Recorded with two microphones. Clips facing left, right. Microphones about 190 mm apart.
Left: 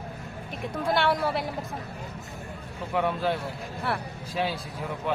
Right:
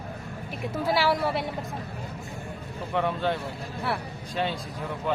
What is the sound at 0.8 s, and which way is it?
Speech, 5° right (ahead or behind).